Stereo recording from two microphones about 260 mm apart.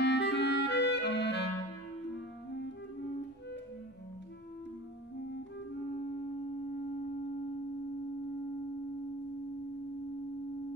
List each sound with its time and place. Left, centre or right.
0.0 s clarinet: left
2.1 s music: left